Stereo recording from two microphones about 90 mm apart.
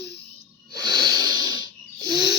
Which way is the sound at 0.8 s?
50° right (ahead or behind).